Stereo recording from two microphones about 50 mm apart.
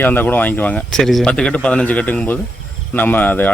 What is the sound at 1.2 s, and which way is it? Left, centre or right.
Speech, centre.